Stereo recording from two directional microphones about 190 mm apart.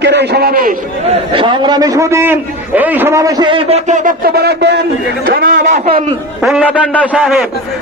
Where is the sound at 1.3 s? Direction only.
25° right (ahead or behind); by 6.0 s 40° right (ahead or behind).